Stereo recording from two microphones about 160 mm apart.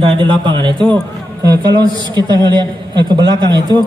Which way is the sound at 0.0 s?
30° right (ahead or behind).